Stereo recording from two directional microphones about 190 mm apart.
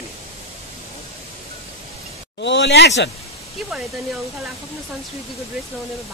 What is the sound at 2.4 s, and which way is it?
Speech, 65° left (ahead or behind).